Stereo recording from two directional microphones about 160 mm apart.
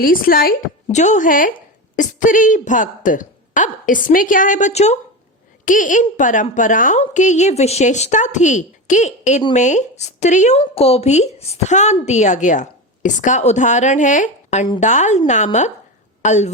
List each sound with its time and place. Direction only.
0.0 s speech: 65° left (ahead or behind)
0.9 s a woman's voice: 45° left (ahead or behind)
5.6 s a woman's voice: 55° left (ahead or behind)
10.6 s a woman's voice: 40° left (ahead or behind)
16.2 s speech: 45° left (ahead or behind)